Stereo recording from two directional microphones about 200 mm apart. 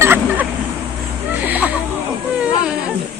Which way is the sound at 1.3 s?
10° right (ahead or behind).